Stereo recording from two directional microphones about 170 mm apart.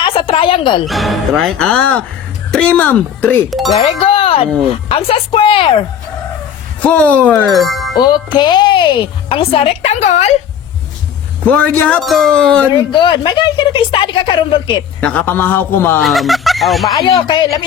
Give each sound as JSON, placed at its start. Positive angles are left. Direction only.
{"t": 0.0, "sound": "a sound", "side_deg": 30}
{"t": 0.9, "sound": "speech", "side_deg": 0}
{"t": 3.8, "sound": "music", "side_deg": 35}
{"t": 4.9, "sound": "a woman's voice", "side_deg": 35}
{"t": 6.8, "sound": "speech", "side_deg": 10}
{"t": 7.9, "sound": "speech", "side_deg": 25}
{"t": 11.4, "sound": "speech", "side_deg": 10}
{"t": 12.7, "sound": "speech", "side_deg": 25}
{"t": 15.0, "sound": "speech", "side_deg": 10}
{"t": 16.0, "sound": "speech", "side_deg": 0}
{"t": 17.2, "sound": "speech", "side_deg": 25}